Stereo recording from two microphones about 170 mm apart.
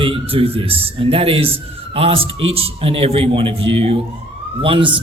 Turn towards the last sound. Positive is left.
turn(degrees=-30)  # may be behind; listen again after turning